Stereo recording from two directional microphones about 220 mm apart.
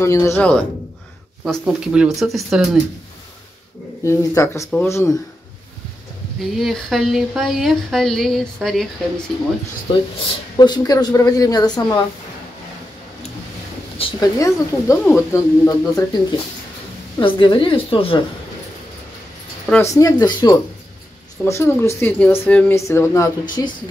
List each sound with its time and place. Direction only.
0.0 s speech: 15° left (ahead or behind)
1.4 s speech: 5° right (ahead or behind)
4.0 s speech: 15° left (ahead or behind)
6.6 s speech: centre (ahead or behind)
9.9 s a woman's voice: 20° left (ahead or behind)
13.9 s speech: 15° left (ahead or behind)
17.2 s a woman's voice: 20° left (ahead or behind)
19.7 s speech: 15° left (ahead or behind)